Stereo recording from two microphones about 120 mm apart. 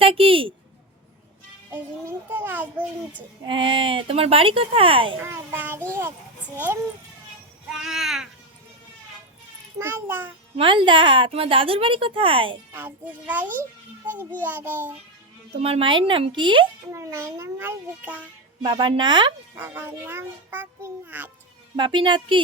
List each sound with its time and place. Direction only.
0.0 s a woman's voice: 50° right (ahead or behind)
1.7 s a child's voice: 15° right (ahead or behind)
3.4 s a woman's voice: 45° right (ahead or behind)
5.1 s a child's voice: 20° right (ahead or behind)
7.7 s speech: 5° right (ahead or behind)
9.7 s a child's voice: 20° right (ahead or behind)
10.6 s a woman's voice: 45° right (ahead or behind)
12.7 s a child's voice: 15° right (ahead or behind)
15.6 s a woman's voice: 50° right (ahead or behind)
16.9 s a child's voice: 25° right (ahead or behind)
18.6 s a woman's voice: 40° right (ahead or behind)
19.5 s a child's voice: 20° right (ahead or behind)
21.8 s a woman's voice: 40° right (ahead or behind)